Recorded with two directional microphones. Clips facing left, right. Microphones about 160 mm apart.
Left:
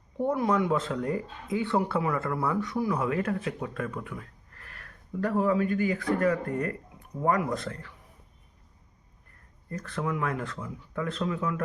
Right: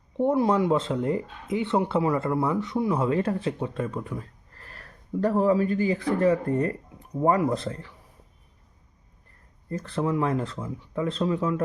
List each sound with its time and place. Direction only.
0.2 s speech: 30° right (ahead or behind)
9.6 s speech: 25° right (ahead or behind)